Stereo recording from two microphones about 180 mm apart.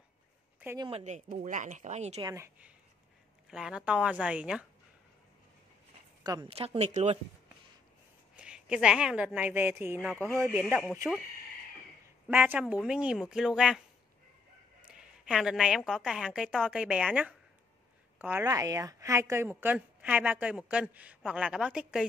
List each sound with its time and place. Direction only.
0.7 s speech: 30° right (ahead or behind)
2.1 s a woman's voice: 20° right (ahead or behind)
3.4 s a woman's voice: 5° right (ahead or behind)
6.2 s speech: 25° right (ahead or behind)
8.4 s a woman's voice: 5° right (ahead or behind)
10.1 s speech: 10° left (ahead or behind)
10.4 s a woman's voice: 10° right (ahead or behind)
12.3 s a woman's voice: 10° right (ahead or behind)
14.9 s a woman's voice: 5° right (ahead or behind)